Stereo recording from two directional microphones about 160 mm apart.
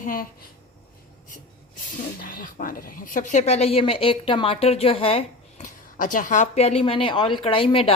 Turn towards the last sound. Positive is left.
turn(degrees=35)  # may be behind; listen again after turning